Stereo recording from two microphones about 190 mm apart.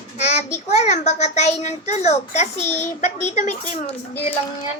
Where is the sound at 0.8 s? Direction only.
35° left (ahead or behind).